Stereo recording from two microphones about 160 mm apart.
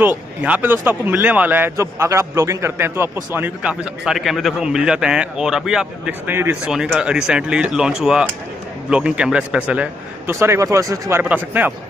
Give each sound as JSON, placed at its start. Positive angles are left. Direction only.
{"t": 0.0, "sound": "a man's voice", "side_deg": -10}